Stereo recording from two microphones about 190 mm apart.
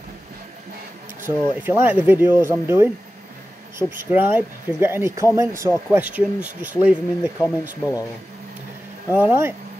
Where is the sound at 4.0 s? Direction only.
10° right (ahead or behind).